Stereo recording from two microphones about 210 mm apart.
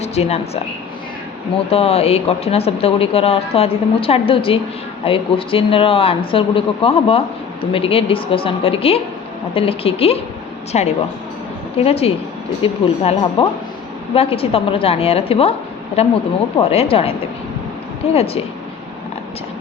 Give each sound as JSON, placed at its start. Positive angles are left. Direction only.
{"t": 0.0, "sound": "a woman's voice", "side_deg": 30}
{"t": 1.7, "sound": "speech", "side_deg": 30}